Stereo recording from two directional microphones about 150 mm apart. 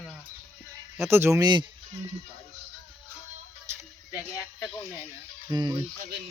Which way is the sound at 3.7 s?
15° right (ahead or behind).